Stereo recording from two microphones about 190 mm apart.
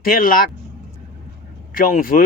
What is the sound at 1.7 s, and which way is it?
Speech, 45° left (ahead or behind).